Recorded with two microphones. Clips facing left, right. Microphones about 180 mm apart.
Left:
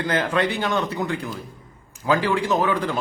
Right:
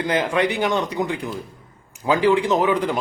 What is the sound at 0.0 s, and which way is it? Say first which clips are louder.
A man's voice: right 2 dB; 15° right (ahead or behind).